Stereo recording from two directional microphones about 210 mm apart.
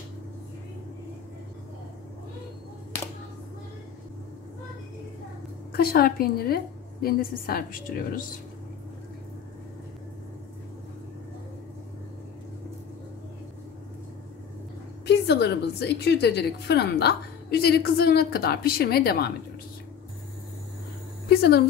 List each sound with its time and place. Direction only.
5.7 s a woman's voice: 45° left (ahead or behind)
15.0 s a woman's voice: 55° left (ahead or behind)
21.3 s speech: 50° left (ahead or behind)